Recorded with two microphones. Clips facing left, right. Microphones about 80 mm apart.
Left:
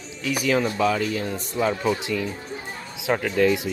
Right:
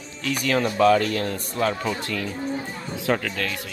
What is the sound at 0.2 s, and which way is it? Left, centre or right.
Speech, centre.